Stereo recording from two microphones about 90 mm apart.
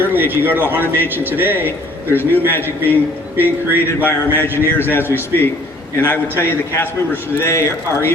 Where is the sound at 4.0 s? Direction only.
20° left (ahead or behind).